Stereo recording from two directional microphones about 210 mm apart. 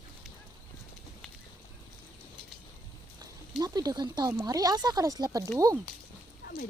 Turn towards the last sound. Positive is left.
turn(degrees=45)  # may be behind; listen again after turning